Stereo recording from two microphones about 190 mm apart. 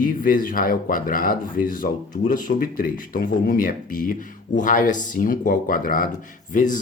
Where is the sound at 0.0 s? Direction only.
45° left (ahead or behind).